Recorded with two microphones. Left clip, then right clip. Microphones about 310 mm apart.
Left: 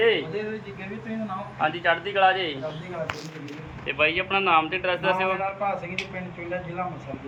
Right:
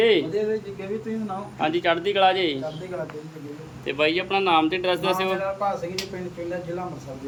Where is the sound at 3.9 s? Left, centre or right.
Right.